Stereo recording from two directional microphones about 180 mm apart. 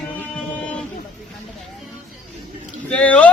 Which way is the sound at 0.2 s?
5° left (ahead or behind).